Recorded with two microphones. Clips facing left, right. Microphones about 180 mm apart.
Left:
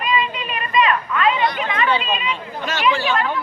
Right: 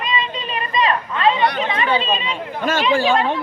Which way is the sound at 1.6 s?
30° right (ahead or behind).